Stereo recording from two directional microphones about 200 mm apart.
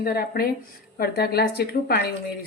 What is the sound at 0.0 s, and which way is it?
Speech, 50° left (ahead or behind).